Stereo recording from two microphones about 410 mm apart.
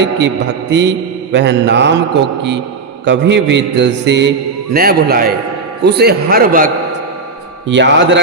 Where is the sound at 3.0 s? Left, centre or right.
Right.